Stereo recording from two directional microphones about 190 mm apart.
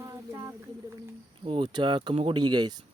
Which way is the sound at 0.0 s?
15° right (ahead or behind).